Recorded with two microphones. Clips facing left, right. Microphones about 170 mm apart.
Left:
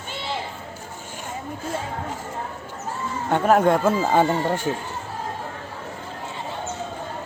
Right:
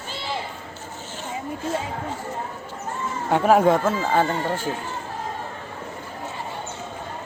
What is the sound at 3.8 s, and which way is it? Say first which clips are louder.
Speech: left 2 dB; 15° left (ahead or behind).